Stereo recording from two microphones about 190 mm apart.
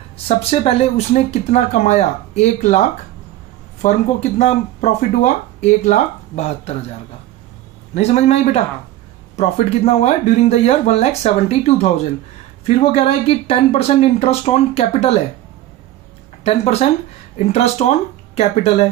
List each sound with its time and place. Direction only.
0.5 s speech: 30° left (ahead or behind)
7.9 s speech: 35° left (ahead or behind)
16.4 s speech: 35° left (ahead or behind)